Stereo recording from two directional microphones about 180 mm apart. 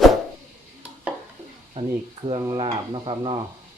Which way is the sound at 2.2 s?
30° right (ahead or behind).